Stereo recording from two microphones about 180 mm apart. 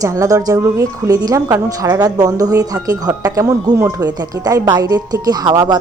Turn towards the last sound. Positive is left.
turn(degrees=-25)  # may be behind; listen again after turning